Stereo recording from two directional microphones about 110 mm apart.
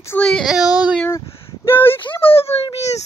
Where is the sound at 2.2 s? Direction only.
60° left (ahead or behind).